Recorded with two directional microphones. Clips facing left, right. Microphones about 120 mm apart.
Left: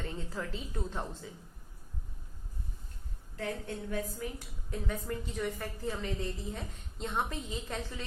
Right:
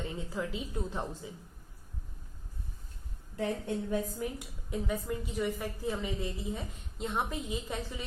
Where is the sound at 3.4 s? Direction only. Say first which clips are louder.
Right 4 dB; 20° right (ahead or behind).